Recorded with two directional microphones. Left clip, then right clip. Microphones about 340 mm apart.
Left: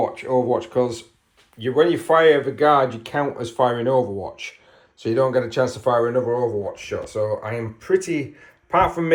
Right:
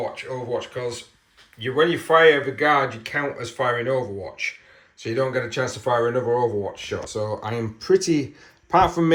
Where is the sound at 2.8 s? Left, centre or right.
Left.